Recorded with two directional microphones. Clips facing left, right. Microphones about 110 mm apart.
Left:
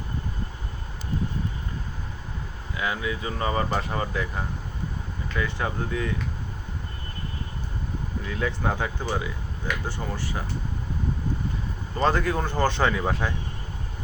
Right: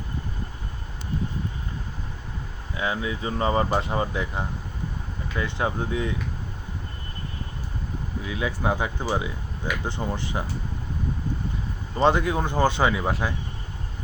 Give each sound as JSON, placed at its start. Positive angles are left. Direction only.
{"t": 2.7, "sound": "speech", "side_deg": -25}
{"t": 8.2, "sound": "speech", "side_deg": -5}
{"t": 11.9, "sound": "speech", "side_deg": -20}